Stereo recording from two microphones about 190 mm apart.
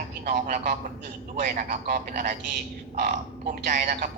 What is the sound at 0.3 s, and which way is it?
A man's voice, 45° right (ahead or behind).